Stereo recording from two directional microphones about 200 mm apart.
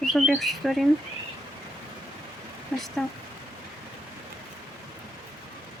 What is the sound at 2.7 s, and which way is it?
Speech, 5° left (ahead or behind).